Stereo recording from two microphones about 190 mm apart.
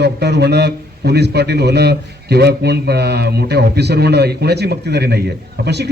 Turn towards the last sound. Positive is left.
turn(degrees=-60)  # may be behind; listen again after turning